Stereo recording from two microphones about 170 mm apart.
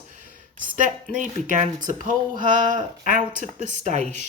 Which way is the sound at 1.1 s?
50° right (ahead or behind).